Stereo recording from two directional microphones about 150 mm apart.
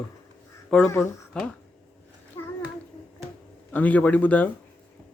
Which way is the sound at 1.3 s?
5° left (ahead or behind).